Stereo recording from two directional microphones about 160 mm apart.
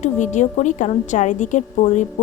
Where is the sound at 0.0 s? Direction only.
50° left (ahead or behind).